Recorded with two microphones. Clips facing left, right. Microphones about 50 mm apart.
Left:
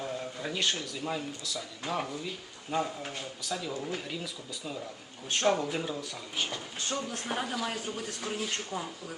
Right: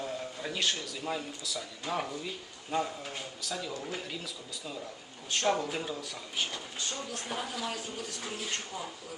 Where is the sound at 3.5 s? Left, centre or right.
Centre.